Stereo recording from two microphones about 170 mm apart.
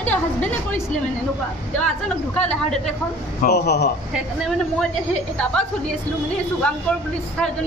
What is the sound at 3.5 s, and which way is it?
Speech, 75° left (ahead or behind).